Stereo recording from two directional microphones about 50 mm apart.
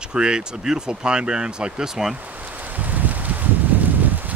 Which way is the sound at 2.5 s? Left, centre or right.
Right.